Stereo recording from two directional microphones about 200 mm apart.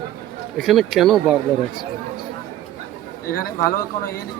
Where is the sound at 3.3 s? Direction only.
45° left (ahead or behind).